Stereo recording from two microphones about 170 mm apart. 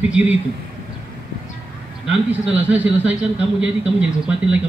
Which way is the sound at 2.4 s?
10° right (ahead or behind).